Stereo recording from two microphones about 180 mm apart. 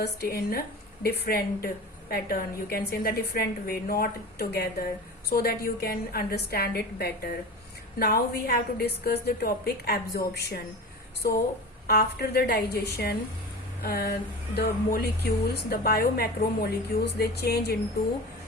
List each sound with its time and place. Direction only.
0.0 s speech: 60° left (ahead or behind)